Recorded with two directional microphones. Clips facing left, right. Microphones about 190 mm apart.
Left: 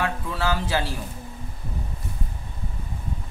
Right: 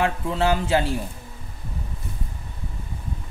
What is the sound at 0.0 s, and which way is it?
Speech, 25° right (ahead or behind).